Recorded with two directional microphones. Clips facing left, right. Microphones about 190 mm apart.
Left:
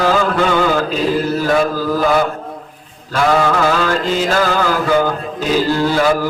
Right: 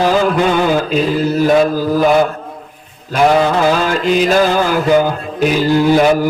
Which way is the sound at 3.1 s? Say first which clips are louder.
Right 3 dB; 20° right (ahead or behind).